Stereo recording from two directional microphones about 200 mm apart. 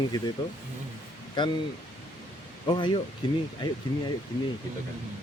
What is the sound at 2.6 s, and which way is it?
Speech, 20° left (ahead or behind).